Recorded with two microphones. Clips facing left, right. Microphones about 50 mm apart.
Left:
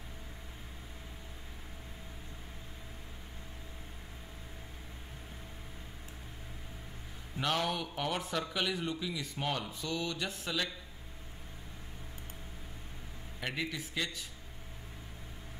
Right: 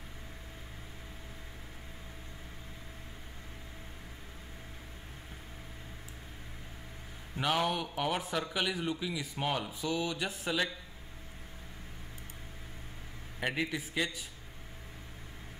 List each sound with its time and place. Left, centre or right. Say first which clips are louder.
7.3 s a man's voice: right 2 dB; centre
13.4 s a man's voice: right 4 dB; centre